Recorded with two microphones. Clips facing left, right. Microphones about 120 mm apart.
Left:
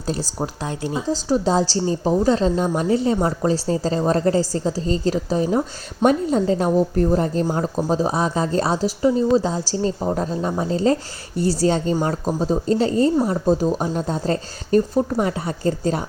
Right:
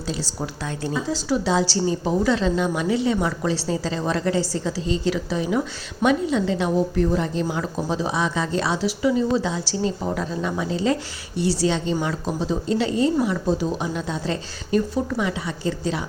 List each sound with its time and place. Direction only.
0.0 s a woman's voice: 40° left (ahead or behind)